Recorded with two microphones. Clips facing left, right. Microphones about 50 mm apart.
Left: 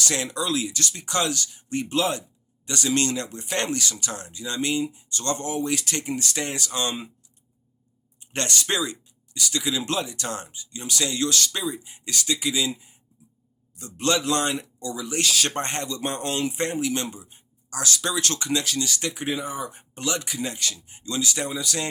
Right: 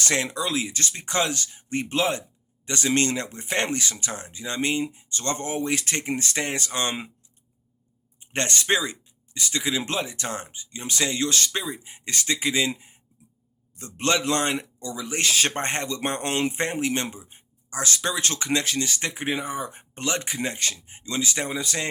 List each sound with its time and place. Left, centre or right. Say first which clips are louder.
0.0 s speech: right 1 dB; right
8.2 s speech: right 1 dB; right